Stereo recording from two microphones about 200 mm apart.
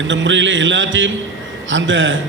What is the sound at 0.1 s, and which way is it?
A man's voice, 70° right (ahead or behind).